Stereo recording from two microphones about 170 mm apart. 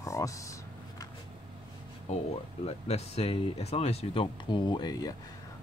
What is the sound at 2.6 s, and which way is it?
Speech, 40° left (ahead or behind).